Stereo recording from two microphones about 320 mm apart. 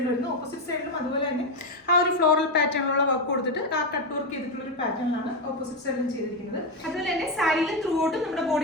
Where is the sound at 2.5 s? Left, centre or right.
Left.